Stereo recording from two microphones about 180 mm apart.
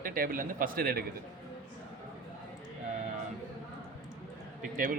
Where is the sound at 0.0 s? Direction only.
50° right (ahead or behind).